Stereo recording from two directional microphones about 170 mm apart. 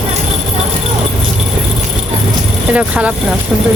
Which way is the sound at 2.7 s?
5° right (ahead or behind).